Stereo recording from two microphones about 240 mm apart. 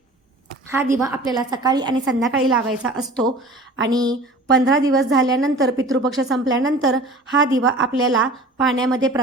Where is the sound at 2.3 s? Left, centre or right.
Centre.